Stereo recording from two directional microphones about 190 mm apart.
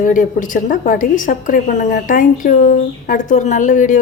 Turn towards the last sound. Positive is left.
turn(degrees=40)  # may be behind; listen again after turning